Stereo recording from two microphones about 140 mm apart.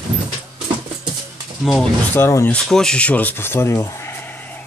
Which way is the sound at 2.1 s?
20° left (ahead or behind).